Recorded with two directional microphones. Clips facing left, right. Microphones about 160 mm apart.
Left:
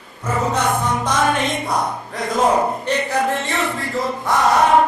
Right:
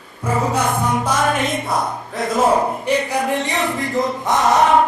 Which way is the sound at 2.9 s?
15° right (ahead or behind).